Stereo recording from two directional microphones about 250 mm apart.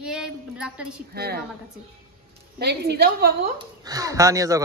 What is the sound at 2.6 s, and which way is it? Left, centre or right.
Speech, right.